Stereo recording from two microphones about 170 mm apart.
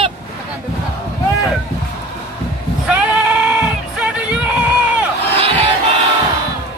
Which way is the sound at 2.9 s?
10° right (ahead or behind).